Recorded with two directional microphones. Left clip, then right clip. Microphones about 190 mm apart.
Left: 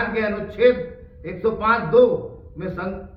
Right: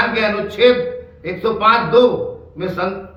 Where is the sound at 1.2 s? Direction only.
15° right (ahead or behind).